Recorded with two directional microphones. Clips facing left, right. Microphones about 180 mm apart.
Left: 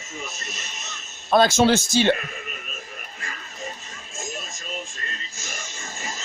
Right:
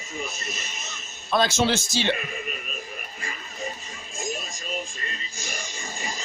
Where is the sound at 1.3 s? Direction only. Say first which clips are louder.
Left 5 dB; 50° left (ahead or behind).